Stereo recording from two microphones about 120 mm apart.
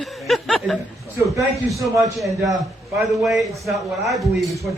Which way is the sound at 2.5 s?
Centre (ahead or behind).